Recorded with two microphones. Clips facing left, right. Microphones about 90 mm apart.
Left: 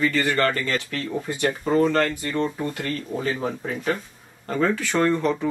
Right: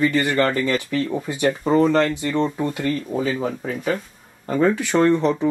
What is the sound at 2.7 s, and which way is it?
Speech, 10° right (ahead or behind).